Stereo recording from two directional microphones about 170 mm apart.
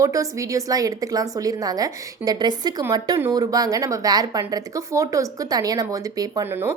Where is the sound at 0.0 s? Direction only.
20° right (ahead or behind).